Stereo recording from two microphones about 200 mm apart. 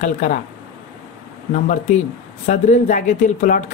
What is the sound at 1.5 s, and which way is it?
Speech, 35° left (ahead or behind).